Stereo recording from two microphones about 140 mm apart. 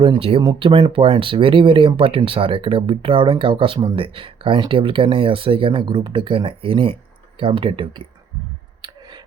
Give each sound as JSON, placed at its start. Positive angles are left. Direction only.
{"t": 0.0, "sound": "speech", "side_deg": -40}